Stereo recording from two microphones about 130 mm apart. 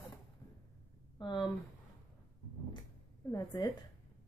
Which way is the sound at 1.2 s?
35° left (ahead or behind).